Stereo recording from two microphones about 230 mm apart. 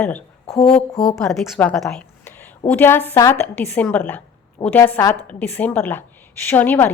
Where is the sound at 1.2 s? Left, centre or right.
Centre.